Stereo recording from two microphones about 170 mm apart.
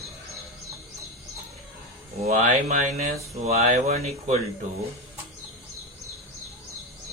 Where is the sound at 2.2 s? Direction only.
45° right (ahead or behind).